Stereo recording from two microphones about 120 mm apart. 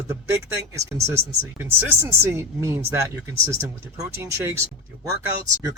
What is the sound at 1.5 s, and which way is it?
Speech, 20° right (ahead or behind).